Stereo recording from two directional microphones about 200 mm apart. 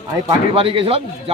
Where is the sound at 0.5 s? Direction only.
25° right (ahead or behind).